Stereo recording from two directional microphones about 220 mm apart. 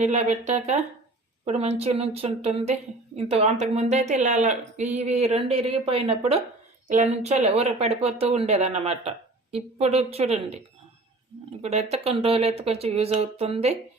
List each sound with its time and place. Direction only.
0.0 s speech: 30° right (ahead or behind)
11.6 s speech: 30° right (ahead or behind)